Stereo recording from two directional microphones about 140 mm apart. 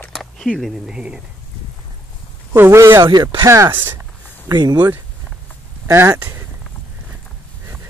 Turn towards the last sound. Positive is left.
turn(degrees=-20)  # may be behind; listen again after turning